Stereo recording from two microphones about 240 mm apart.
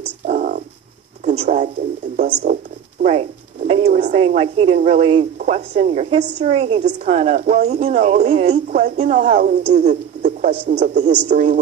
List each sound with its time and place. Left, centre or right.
0.3 s a sound: right
1.2 s speech: right
2.1 s speech: right
3.0 s a woman's voice: right